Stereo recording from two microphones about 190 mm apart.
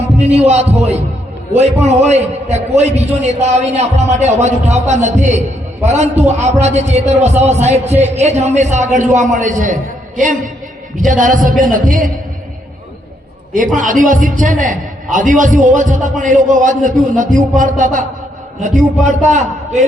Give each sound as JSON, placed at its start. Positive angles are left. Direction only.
{"t": 0.2, "sound": "a man's voice", "side_deg": -35}
{"t": 13.7, "sound": "a man's voice", "side_deg": -45}
{"t": 19.0, "sound": "a man's voice", "side_deg": -40}